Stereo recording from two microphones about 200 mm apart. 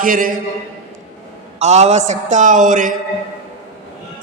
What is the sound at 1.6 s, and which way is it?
Speech, 35° right (ahead or behind).